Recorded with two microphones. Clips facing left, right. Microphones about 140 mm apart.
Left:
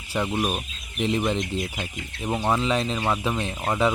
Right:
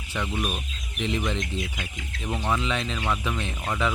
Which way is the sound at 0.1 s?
35° left (ahead or behind).